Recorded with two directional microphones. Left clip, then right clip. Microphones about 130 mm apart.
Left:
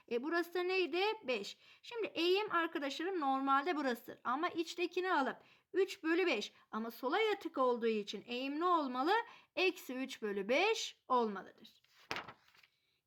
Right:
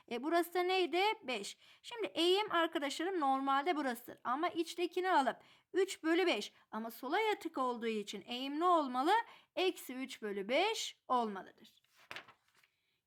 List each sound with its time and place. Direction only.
0.1 s a woman's voice: 40° right (ahead or behind)